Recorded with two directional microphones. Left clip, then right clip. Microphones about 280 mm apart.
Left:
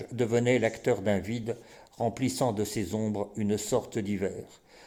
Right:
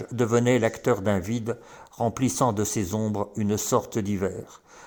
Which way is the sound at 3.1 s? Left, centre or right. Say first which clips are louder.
Right 3 dB; centre.